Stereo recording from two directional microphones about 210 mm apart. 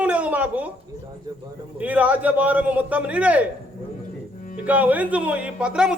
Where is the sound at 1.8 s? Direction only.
5° right (ahead or behind).